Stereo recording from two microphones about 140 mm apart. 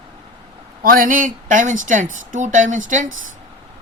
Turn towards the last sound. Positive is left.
turn(degrees=-65)  # may be behind; listen again after turning